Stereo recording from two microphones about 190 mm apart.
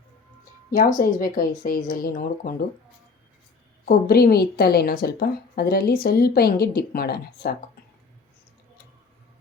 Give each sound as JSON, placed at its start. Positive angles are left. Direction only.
{"t": 0.7, "sound": "a woman's voice", "side_deg": 45}
{"t": 3.8, "sound": "a woman's voice", "side_deg": 55}